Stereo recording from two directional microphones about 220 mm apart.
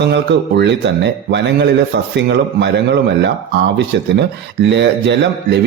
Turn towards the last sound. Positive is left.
turn(degrees=-55)  # may be behind; listen again after turning